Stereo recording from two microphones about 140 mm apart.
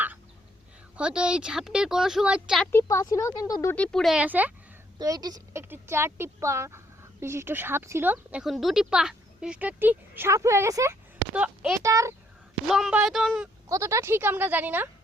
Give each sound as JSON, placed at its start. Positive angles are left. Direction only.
{"t": 0.9, "sound": "speech", "side_deg": -5}
{"t": 2.8, "sound": "speech", "side_deg": 25}
{"t": 3.8, "sound": "speech", "side_deg": 0}
{"t": 4.9, "sound": "speech", "side_deg": -30}
{"t": 5.6, "sound": "speech", "side_deg": -15}
{"t": 11.3, "sound": "speech", "side_deg": -5}
{"t": 11.8, "sound": "a child's voice", "side_deg": -20}
{"t": 12.6, "sound": "speech", "side_deg": 0}
{"t": 13.7, "sound": "speech", "side_deg": -20}